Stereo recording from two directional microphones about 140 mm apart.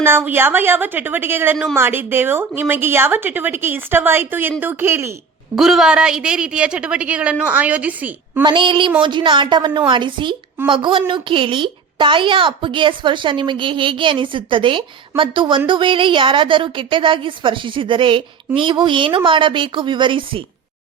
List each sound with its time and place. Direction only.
0.0 s a woman's voice: 15° right (ahead or behind)
5.5 s a woman's voice: centre (ahead or behind)
8.4 s a woman's voice: 35° right (ahead or behind)